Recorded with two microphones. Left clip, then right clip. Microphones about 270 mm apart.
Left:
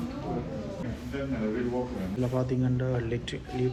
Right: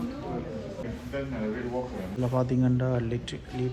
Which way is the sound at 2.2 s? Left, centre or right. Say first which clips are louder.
Right 3 dB; centre.